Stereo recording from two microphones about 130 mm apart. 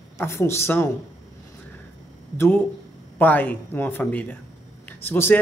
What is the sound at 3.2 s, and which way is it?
Speech, 15° left (ahead or behind).